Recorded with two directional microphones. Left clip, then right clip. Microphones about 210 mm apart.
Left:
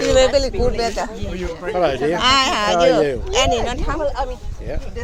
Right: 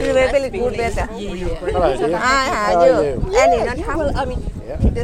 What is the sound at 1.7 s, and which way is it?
Speech, 35° left (ahead or behind).